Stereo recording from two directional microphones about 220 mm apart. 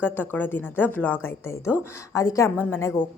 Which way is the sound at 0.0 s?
10° left (ahead or behind).